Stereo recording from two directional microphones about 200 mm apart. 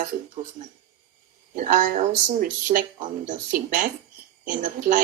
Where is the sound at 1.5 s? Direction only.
40° right (ahead or behind).